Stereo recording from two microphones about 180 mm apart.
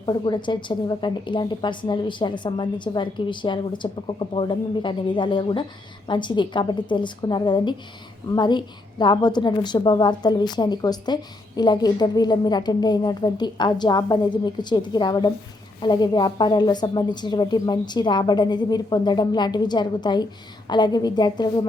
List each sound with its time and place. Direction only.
0.0 s a woman's voice: 25° left (ahead or behind)